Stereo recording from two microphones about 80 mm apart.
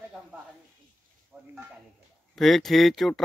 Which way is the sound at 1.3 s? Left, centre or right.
Right.